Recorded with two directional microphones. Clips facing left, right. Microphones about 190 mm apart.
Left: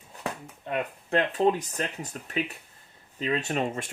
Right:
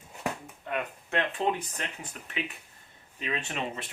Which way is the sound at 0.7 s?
35° left (ahead or behind).